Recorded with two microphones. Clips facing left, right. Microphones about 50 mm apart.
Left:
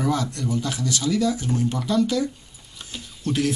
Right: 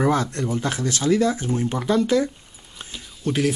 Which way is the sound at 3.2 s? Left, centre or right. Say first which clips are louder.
Right 2 dB; centre.